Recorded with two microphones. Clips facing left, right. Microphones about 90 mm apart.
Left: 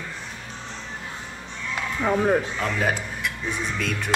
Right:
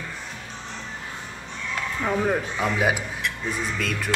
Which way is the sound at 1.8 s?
10° left (ahead or behind).